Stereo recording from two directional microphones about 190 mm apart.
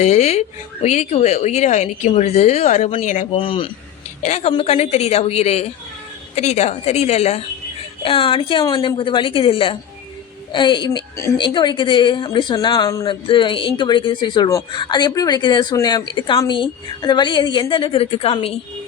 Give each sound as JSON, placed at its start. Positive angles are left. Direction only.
{"t": 0.0, "sound": "speech", "side_deg": 35}
{"t": 3.3, "sound": "a woman's voice", "side_deg": 25}